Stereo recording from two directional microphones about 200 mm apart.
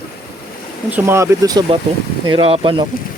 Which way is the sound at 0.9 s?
10° right (ahead or behind).